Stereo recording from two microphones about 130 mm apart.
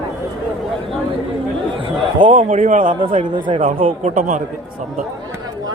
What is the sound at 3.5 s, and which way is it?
Speech, 55° right (ahead or behind).